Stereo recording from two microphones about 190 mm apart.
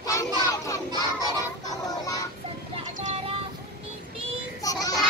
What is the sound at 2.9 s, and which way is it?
Child singing, 35° right (ahead or behind).